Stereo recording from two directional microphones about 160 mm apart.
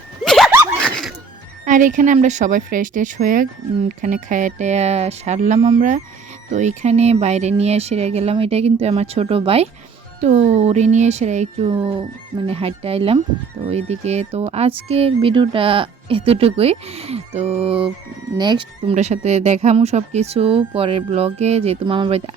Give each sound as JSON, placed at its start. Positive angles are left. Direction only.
{"t": 0.3, "sound": "a sound", "side_deg": 0}
{"t": 0.9, "sound": "music", "side_deg": 5}
{"t": 1.6, "sound": "speech", "side_deg": -55}
{"t": 11.7, "sound": "speech", "side_deg": -30}
{"t": 18.9, "sound": "speech", "side_deg": -45}